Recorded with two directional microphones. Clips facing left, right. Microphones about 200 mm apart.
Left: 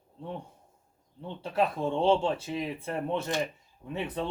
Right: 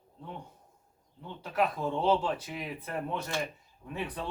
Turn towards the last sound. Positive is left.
turn(degrees=25)  # may be behind; listen again after turning